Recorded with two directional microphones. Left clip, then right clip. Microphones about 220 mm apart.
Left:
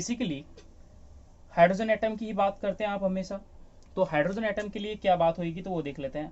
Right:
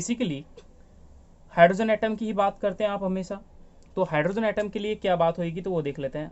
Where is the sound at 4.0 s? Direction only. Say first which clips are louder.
Right 2 dB; 25° right (ahead or behind); by 6.3 s 40° right (ahead or behind).